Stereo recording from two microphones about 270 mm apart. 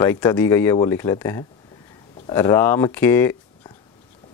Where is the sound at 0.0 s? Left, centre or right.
Centre.